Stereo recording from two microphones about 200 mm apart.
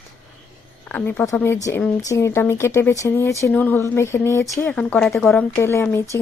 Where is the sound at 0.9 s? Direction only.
10° left (ahead or behind).